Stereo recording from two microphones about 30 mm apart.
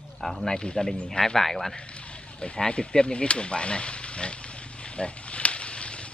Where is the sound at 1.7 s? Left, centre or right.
Left.